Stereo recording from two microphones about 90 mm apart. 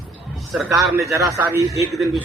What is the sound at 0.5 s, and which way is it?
Speech, 5° right (ahead or behind).